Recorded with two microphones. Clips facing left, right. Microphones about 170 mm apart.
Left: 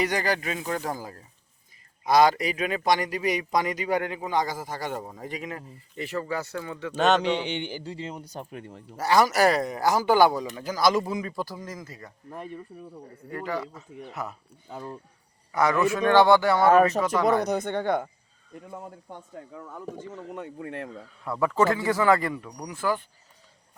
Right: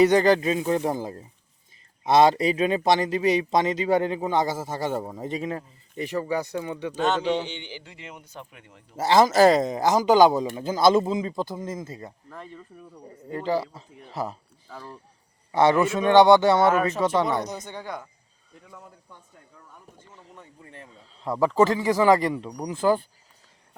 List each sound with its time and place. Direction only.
0.0 s speech: 25° right (ahead or behind)
6.9 s a man's voice: 75° left (ahead or behind); by 8.8 s 40° left (ahead or behind)
9.0 s speech: 25° right (ahead or behind)
12.3 s speech: 20° left (ahead or behind)
13.1 s speech: 20° right (ahead or behind)
14.7 s speech: 30° left (ahead or behind)
15.5 s speech: 30° right (ahead or behind)
16.7 s a man's voice: 40° left (ahead or behind)
17.0 s speech: 25° right (ahead or behind)
17.4 s speech: 60° left (ahead or behind)
19.4 s speech: 90° left; by 21.1 s 75° left (ahead or behind)
21.1 s a man's voice: 20° right (ahead or behind)
22.4 s speech: 30° right (ahead or behind)